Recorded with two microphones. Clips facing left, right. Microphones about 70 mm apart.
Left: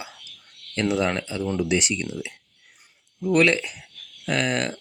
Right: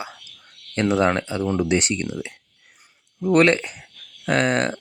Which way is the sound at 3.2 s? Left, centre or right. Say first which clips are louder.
Right 3 dB; right.